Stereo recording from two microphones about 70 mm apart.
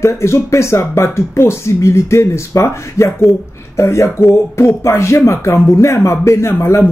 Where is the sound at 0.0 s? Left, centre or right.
Left.